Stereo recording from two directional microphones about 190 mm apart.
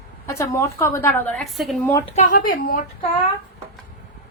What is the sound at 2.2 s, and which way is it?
Speech, 45° left (ahead or behind).